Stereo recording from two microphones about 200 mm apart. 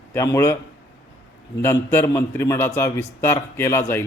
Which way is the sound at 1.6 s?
10° left (ahead or behind).